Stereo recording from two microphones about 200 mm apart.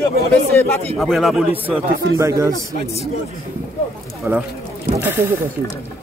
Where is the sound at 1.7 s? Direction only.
15° right (ahead or behind).